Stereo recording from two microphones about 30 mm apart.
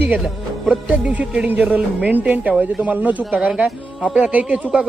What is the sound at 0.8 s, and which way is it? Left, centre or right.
Speech, right.